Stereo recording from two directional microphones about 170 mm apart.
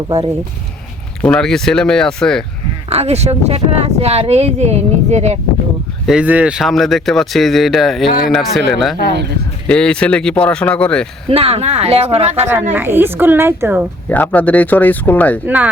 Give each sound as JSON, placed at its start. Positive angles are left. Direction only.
{"t": 1.2, "sound": "speech", "side_deg": 5}
{"t": 2.9, "sound": "speech", "side_deg": -40}
{"t": 6.1, "sound": "speech", "side_deg": -5}
{"t": 9.0, "sound": "speech", "side_deg": -80}
{"t": 9.6, "sound": "speech", "side_deg": 5}
{"t": 11.3, "sound": "speech", "side_deg": -35}
{"t": 12.7, "sound": "a woman's voice", "side_deg": -10}
{"t": 14.1, "sound": "speech", "side_deg": 10}
{"t": 15.4, "sound": "a woman's voice", "side_deg": -10}